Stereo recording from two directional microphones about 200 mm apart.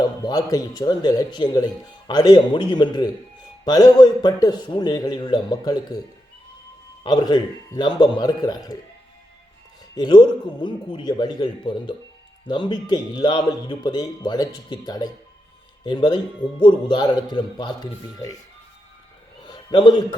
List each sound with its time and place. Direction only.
0.0 s speech: 20° left (ahead or behind)
7.0 s speech: 20° left (ahead or behind)
9.9 s speech: 20° left (ahead or behind)
19.5 s a man's voice: 20° left (ahead or behind)